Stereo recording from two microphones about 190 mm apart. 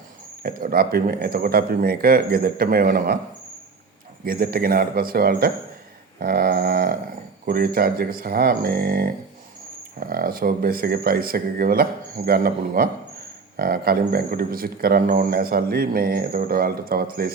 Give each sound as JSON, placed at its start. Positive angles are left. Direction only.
{"t": 0.4, "sound": "speech", "side_deg": -50}
{"t": 4.3, "sound": "speech", "side_deg": -50}
{"t": 6.1, "sound": "a sound", "side_deg": -50}
{"t": 7.4, "sound": "speech", "side_deg": -55}